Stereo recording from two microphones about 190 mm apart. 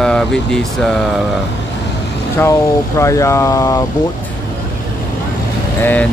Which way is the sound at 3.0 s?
15° left (ahead or behind).